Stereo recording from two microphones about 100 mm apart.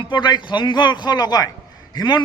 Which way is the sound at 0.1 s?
50° left (ahead or behind).